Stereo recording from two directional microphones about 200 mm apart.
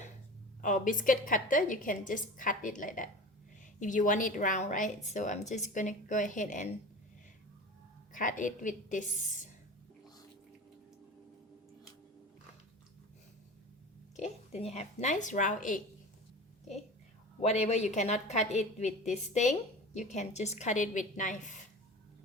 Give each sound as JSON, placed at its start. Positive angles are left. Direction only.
{"t": 0.6, "sound": "a woman's voice", "side_deg": 40}
{"t": 8.1, "sound": "a woman's voice", "side_deg": 40}
{"t": 14.2, "sound": "a woman's voice", "side_deg": 30}
{"t": 17.4, "sound": "a woman's voice", "side_deg": 35}